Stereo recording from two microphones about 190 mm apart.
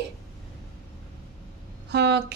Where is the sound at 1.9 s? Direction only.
60° right (ahead or behind).